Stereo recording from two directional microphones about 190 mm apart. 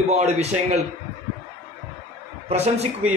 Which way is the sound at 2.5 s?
35° right (ahead or behind).